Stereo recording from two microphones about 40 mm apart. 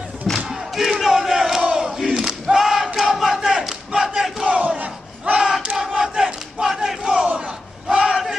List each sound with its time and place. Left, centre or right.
0.5 s crowd: centre
1.8 s battle cry: centre
4.5 s battle cry: right
5.4 s battle cry: centre
7.9 s a sound: centre